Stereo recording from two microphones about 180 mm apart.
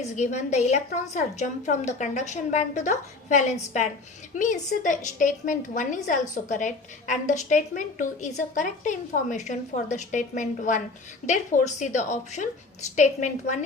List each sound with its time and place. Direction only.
0.0 s a woman's voice: 40° left (ahead or behind)